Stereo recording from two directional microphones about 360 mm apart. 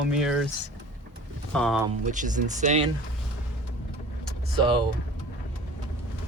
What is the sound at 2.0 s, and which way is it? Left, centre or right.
Speech, right.